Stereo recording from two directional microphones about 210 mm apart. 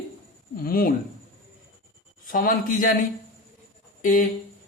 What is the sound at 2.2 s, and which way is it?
Speech, 45° left (ahead or behind).